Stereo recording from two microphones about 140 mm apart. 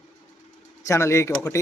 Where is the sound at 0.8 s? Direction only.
20° left (ahead or behind).